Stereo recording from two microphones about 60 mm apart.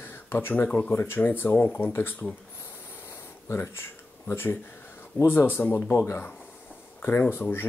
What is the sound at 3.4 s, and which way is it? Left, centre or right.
Speech, left.